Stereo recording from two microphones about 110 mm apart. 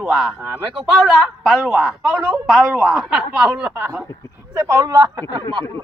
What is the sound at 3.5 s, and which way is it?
Speech, 15° right (ahead or behind).